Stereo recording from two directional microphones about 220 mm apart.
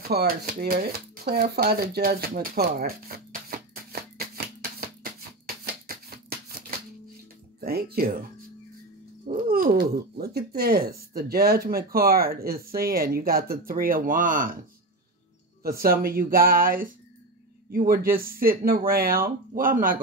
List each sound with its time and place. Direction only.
0.1 s speech: 45° right (ahead or behind)
5.9 s shuffling cards: 45° right (ahead or behind)
7.6 s speech: 45° right (ahead or behind)
9.3 s speech: 40° right (ahead or behind)
15.6 s speech: 40° right (ahead or behind)